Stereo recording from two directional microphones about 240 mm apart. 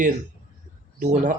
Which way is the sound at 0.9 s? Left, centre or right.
Right.